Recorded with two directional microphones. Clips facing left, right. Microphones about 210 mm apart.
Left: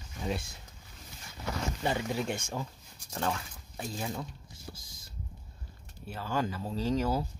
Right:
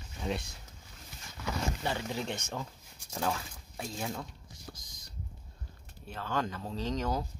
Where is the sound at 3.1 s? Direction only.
5° right (ahead or behind).